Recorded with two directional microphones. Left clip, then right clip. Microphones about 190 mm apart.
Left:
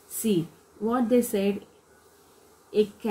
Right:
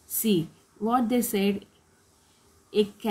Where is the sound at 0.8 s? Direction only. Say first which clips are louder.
Left 1 dB; 35° right (ahead or behind).